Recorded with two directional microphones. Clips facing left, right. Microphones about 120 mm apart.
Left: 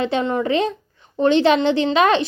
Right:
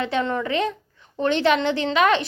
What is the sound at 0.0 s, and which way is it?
Speech, 25° left (ahead or behind).